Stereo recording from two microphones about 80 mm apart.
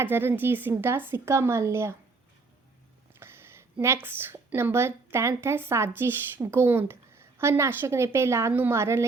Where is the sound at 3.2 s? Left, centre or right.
Right.